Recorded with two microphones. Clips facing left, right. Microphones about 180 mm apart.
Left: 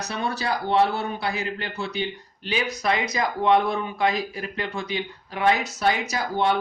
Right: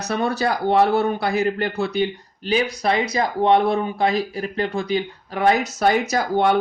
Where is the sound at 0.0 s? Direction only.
45° right (ahead or behind).